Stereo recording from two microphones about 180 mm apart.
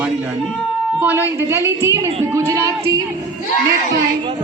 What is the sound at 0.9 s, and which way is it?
A woman's voice, 10° right (ahead or behind).